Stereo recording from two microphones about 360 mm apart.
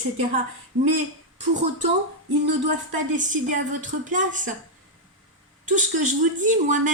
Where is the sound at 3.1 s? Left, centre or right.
Right.